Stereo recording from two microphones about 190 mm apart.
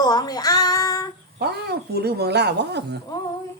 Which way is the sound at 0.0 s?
20° left (ahead or behind).